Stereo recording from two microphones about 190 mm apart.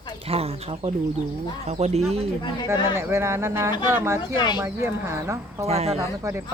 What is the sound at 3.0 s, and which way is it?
Speech, 15° right (ahead or behind).